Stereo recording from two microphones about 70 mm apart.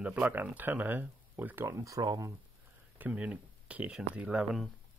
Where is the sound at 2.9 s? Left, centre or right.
Right.